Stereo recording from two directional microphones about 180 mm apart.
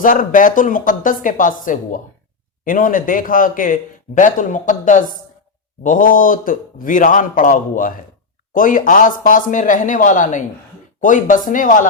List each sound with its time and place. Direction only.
0.0 s speech: 50° left (ahead or behind)